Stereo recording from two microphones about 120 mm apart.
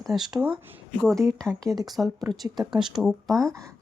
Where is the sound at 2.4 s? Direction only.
30° right (ahead or behind).